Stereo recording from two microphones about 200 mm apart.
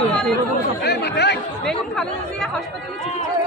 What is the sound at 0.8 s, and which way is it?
Chatter, 55° left (ahead or behind).